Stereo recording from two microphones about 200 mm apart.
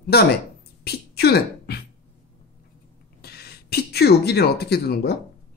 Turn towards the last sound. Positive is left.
turn(degrees=55)  # may be behind; listen again after turning